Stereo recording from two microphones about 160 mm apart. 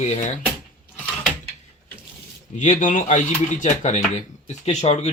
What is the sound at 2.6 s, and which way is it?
Speech, 55° left (ahead or behind).